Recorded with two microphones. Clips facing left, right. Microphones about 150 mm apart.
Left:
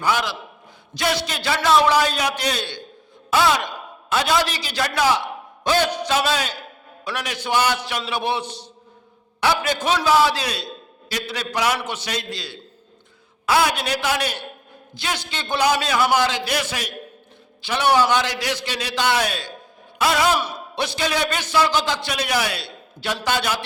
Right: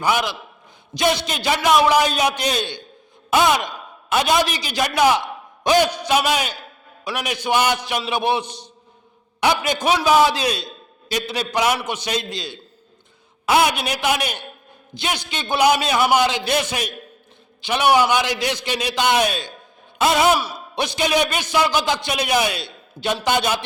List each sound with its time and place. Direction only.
0.0 s a man's voice: 15° right (ahead or behind)